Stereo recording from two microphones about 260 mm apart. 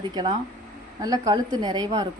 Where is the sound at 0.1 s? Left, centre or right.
Centre.